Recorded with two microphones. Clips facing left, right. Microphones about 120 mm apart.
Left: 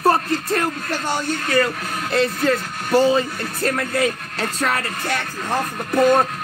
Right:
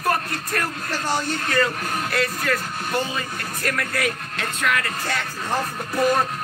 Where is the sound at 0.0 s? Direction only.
30° left (ahead or behind).